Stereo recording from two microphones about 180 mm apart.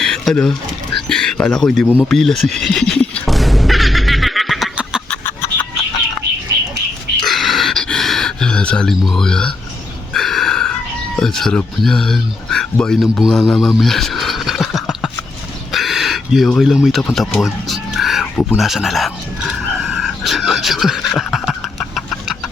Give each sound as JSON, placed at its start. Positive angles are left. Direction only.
{"t": 0.0, "sound": "pigeon", "side_deg": 5}
{"t": 1.0, "sound": "speech", "side_deg": 5}
{"t": 2.0, "sound": "music", "side_deg": 0}
{"t": 5.1, "sound": "chicken", "side_deg": 10}
{"t": 7.2, "sound": "a sound", "side_deg": 0}
{"t": 11.2, "sound": "speech", "side_deg": 5}
{"t": 15.7, "sound": "a sound", "side_deg": 0}